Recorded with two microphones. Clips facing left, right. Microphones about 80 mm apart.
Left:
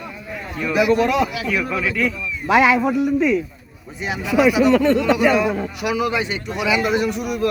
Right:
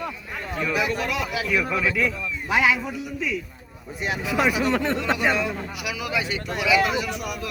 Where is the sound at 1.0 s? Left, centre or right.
Left.